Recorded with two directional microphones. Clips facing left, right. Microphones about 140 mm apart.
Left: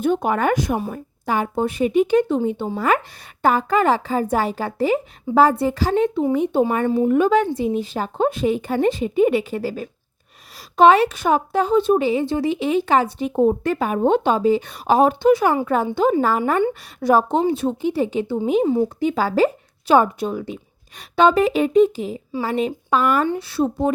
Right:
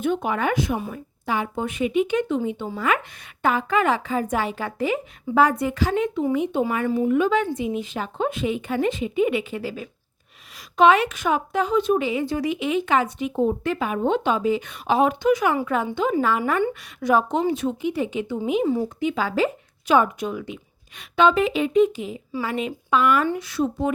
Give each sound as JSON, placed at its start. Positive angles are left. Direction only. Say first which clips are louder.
{"t": 0.0, "sound": "a woman's voice", "louder": "left 4 dB", "side_deg": 40}
{"t": 18.6, "sound": "speech", "louder": "left 3 dB", "side_deg": 20}
{"t": 18.9, "sound": "a woman's voice", "louder": "left 4 dB", "side_deg": 35}